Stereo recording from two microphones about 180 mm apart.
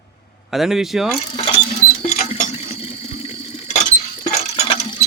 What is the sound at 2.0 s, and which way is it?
Water, 35° left (ahead or behind).